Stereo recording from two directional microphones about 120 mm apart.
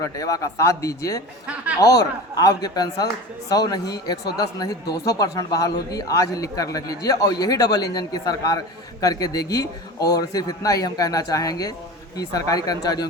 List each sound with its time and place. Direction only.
0.0 s speech: 30° left (ahead or behind)